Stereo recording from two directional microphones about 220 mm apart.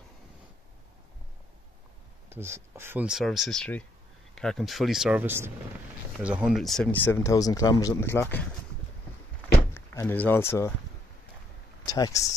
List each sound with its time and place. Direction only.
2.2 s speech: 10° right (ahead or behind); by 8.5 s 10° left (ahead or behind)
9.8 s speech: 10° left (ahead or behind)
11.8 s speech: 15° left (ahead or behind)